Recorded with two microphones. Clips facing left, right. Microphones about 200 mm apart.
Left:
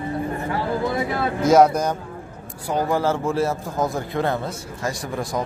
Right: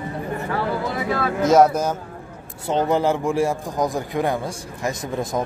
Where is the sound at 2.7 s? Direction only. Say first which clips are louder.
Right 2 dB; 20° right (ahead or behind).